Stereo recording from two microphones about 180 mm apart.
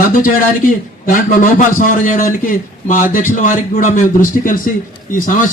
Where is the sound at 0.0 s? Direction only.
50° left (ahead or behind).